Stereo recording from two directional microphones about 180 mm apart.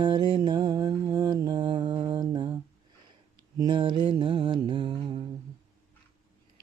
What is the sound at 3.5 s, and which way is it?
Mantra, 25° right (ahead or behind).